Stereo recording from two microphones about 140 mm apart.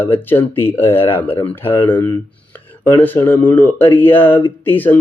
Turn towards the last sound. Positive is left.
turn(degrees=15)  # may be behind; listen again after turning